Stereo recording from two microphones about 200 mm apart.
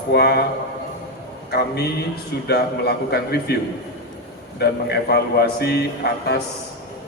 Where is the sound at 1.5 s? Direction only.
55° left (ahead or behind).